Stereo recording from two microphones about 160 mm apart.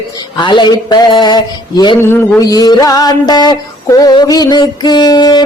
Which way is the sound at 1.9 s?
15° left (ahead or behind).